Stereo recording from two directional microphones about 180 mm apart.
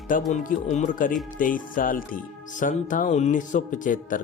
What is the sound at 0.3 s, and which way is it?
Speech, 40° left (ahead or behind).